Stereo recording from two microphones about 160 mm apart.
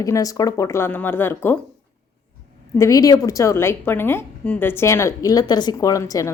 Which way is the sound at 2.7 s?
20° left (ahead or behind).